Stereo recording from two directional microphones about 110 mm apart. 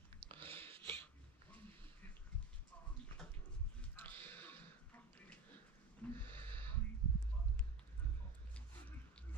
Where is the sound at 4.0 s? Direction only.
20° left (ahead or behind).